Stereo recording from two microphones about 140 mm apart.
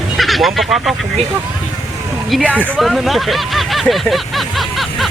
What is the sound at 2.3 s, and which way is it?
Speech, 10° left (ahead or behind).